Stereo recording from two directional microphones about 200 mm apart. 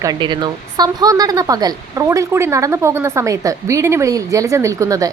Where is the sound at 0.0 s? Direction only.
20° right (ahead or behind).